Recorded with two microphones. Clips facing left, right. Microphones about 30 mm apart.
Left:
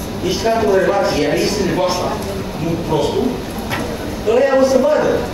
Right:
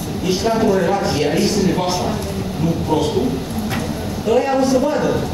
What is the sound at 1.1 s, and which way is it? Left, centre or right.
Speech, centre.